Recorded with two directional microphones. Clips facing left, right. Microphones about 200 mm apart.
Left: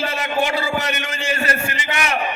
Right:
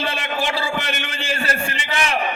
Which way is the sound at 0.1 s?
30° right (ahead or behind).